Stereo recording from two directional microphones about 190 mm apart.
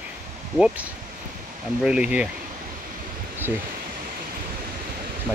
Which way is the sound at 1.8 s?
5° right (ahead or behind).